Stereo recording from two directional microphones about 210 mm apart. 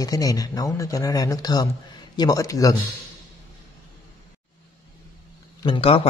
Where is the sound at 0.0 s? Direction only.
15° left (ahead or behind).